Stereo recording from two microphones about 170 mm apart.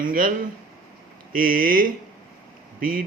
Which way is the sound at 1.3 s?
55° right (ahead or behind).